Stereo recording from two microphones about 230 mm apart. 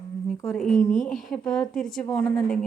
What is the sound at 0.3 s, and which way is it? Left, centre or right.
A woman's voice, centre.